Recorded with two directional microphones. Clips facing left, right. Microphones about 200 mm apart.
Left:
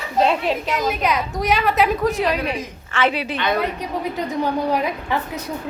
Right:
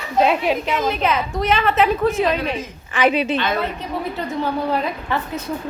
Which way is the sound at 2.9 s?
20° right (ahead or behind).